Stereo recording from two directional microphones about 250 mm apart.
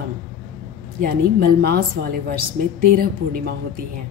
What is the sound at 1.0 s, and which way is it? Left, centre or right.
A woman's voice, right.